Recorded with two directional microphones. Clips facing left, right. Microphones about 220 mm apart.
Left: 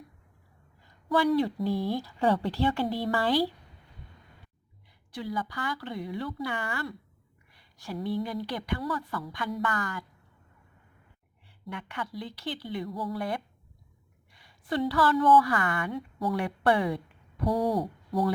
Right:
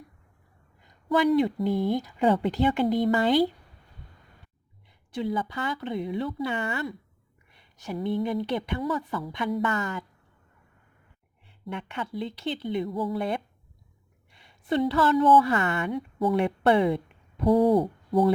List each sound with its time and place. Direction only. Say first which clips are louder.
0.8 s a sound: right 3 dB; 20° right (ahead or behind)
1.6 s speech: right 4 dB; 20° right (ahead or behind)
5.1 s speech: right 5 dB; 25° right (ahead or behind)
7.5 s a sound: right 3 dB; 20° right (ahead or behind)
8.0 s speech: right 4 dB; 20° right (ahead or behind)
11.7 s a woman's voice: right 4 dB; 25° right (ahead or behind)